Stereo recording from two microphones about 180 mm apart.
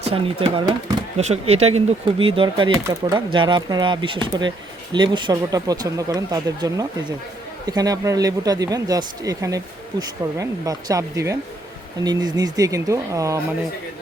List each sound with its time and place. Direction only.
0.0 s speech: 30° right (ahead or behind); by 13.4 s 15° right (ahead or behind)